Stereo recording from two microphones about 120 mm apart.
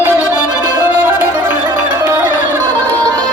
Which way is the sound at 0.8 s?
15° right (ahead or behind).